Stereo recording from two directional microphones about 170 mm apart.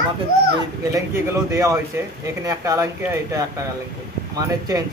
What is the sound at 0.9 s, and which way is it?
Speech, 15° right (ahead or behind).